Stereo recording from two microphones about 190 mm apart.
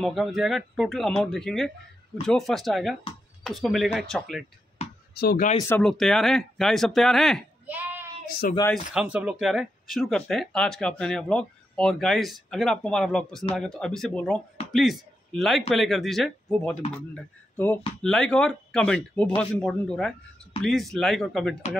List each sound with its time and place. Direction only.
0.0 s speech: centre (ahead or behind)
5.1 s speech: 55° left (ahead or behind)
5.6 s speech: 10° left (ahead or behind)
7.6 s child singing: 10° right (ahead or behind)
8.4 s speech: 50° left (ahead or behind)
8.9 s a man's voice: 5° right (ahead or behind)